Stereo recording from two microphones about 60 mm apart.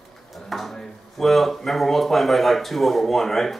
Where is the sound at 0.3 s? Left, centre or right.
Centre.